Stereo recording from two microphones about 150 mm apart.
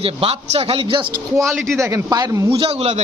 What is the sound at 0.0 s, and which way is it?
A man's voice, 40° right (ahead or behind).